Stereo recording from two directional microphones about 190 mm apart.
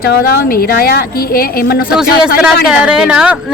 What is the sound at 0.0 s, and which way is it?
A woman's voice, 55° left (ahead or behind).